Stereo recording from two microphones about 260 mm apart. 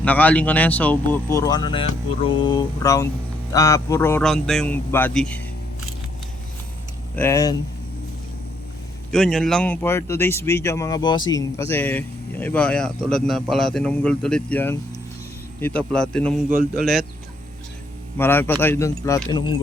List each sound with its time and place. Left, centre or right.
0.0 s speech: centre
7.2 s speech: centre
9.1 s speech: centre
16.5 s speech: right
18.2 s speech: centre